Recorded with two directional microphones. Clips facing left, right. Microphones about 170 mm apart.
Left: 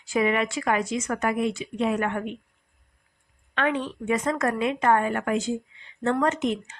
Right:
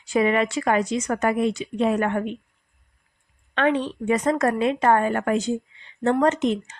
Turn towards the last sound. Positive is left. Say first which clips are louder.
# right 4 dB
turn(degrees=-35)  # may be behind; listen again after turning